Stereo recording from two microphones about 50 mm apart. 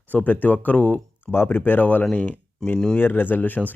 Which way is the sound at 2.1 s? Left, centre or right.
Left.